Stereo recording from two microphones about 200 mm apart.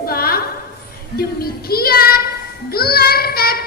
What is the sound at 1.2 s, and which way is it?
Child singing, 50° left (ahead or behind).